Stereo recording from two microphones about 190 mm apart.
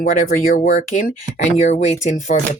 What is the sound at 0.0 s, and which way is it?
Speech, 40° left (ahead or behind).